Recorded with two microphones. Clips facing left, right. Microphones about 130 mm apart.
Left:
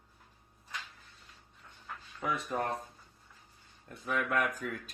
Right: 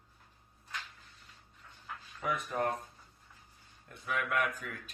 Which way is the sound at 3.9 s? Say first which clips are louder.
Left 2 dB; 40° left (ahead or behind).